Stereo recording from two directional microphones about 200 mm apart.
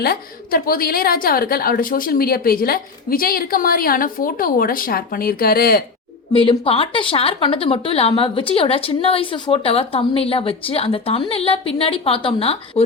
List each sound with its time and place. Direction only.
0.0 s a woman's voice: 50° left (ahead or behind)
6.3 s speech: 25° left (ahead or behind)